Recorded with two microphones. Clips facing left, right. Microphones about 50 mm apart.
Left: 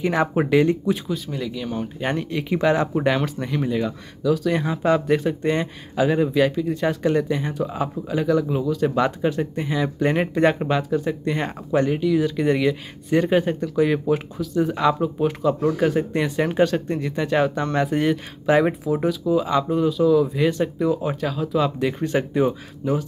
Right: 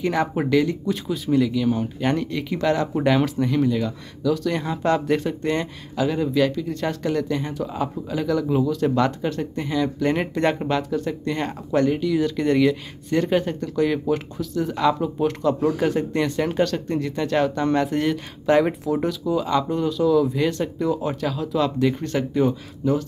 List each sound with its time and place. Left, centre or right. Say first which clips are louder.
0.0 s speech: left 2 dB; centre
0.6 s speech: left 3 dB; left
1.0 s speech: right 6 dB; centre
2.9 s speech: right 1 dB; centre
5.9 s speech: left 2 dB; left